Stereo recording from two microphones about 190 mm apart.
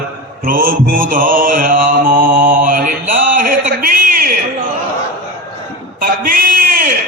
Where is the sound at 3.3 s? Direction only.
50° right (ahead or behind).